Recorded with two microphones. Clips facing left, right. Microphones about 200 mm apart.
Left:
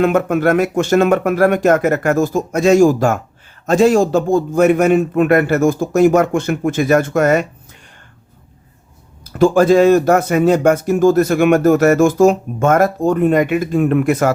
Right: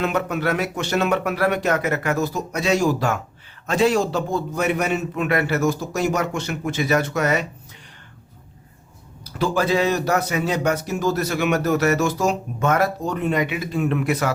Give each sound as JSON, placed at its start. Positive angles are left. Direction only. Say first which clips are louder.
{"t": 0.0, "sound": "speech", "louder": "left 9 dB", "side_deg": 50}
{"t": 9.2, "sound": "speech", "louder": "left 10 dB", "side_deg": 50}